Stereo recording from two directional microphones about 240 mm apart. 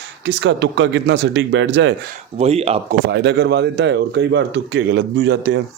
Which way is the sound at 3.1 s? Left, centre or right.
Right.